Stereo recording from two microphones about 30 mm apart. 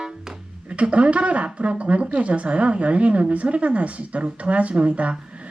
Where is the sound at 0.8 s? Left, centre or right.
Right.